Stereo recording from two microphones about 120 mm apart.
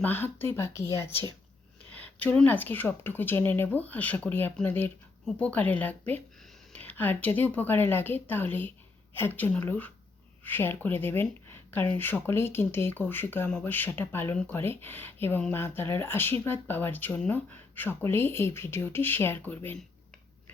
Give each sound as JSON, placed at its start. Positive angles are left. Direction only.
{"t": 0.0, "sound": "speech", "side_deg": 15}
{"t": 1.9, "sound": "speech", "side_deg": 10}